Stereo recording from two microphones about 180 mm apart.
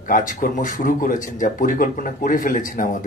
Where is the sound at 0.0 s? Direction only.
50° left (ahead or behind).